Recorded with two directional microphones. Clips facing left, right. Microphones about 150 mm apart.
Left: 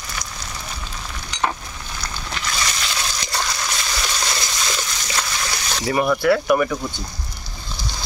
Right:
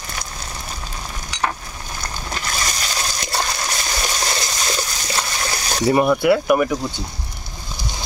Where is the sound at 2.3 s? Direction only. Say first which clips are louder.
Even; 40° right (ahead or behind).